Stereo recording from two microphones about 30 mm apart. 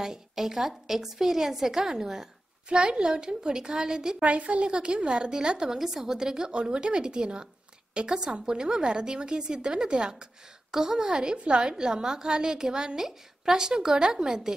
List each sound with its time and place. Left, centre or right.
0.0 s a woman's voice: centre
2.7 s a woman's voice: right
4.2 s a woman's voice: right
5.8 s a woman's voice: centre
6.5 s a woman's voice: right
10.7 s a woman's voice: centre